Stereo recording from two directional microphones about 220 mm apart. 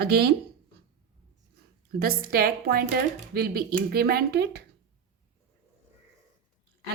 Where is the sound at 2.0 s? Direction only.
40° right (ahead or behind).